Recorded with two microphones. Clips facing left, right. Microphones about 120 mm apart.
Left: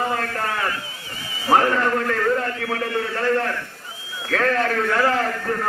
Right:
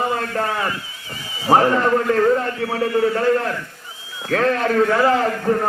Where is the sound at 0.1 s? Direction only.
25° right (ahead or behind).